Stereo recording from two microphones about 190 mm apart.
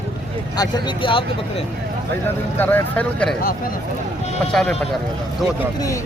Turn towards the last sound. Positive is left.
turn(degrees=5)  # may be behind; listen again after turning